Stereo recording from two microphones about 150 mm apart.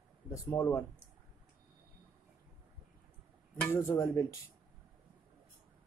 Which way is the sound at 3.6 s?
15° left (ahead or behind).